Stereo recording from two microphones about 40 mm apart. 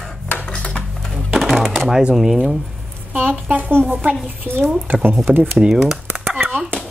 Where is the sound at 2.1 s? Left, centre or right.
Centre.